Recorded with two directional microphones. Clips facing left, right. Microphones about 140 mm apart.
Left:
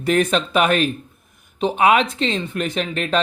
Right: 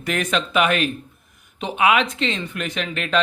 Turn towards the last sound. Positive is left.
turn(degrees=35)  # may be behind; listen again after turning